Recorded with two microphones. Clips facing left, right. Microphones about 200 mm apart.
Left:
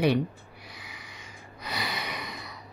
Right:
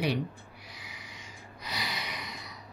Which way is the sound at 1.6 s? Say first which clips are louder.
Left 4 dB; 55° left (ahead or behind).